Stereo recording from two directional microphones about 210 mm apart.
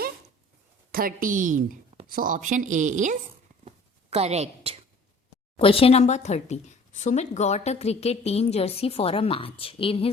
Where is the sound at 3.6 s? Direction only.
30° right (ahead or behind).